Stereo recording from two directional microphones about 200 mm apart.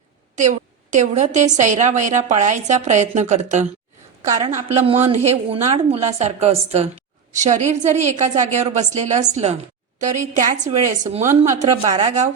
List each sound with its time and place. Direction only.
0.3 s a woman's voice: 35° right (ahead or behind)